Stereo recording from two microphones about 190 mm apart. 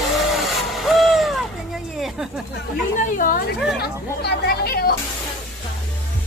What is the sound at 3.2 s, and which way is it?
Speech, 45° left (ahead or behind).